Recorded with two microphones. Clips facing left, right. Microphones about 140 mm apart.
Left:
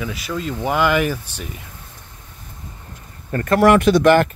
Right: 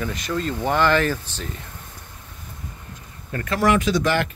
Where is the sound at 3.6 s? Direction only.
60° left (ahead or behind).